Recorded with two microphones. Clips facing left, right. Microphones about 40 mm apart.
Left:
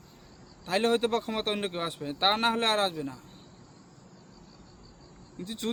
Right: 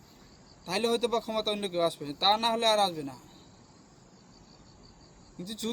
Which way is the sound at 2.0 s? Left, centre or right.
Centre.